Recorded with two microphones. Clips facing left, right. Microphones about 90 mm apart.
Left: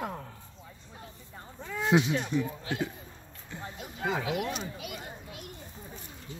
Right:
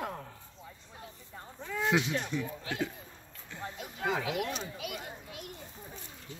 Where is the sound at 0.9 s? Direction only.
Centre (ahead or behind).